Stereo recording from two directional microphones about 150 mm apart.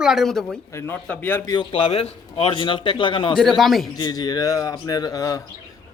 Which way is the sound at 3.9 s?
25° left (ahead or behind).